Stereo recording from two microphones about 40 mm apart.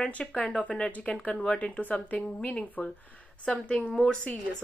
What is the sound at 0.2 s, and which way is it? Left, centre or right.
A woman's voice, centre.